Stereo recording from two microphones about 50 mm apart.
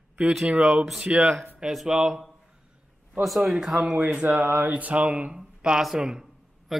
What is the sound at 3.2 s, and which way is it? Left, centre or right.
Speech, centre.